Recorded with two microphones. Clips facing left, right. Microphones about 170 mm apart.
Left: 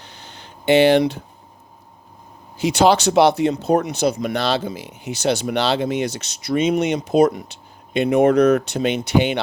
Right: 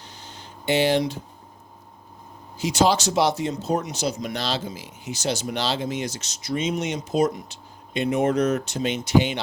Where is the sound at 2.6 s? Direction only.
65° left (ahead or behind).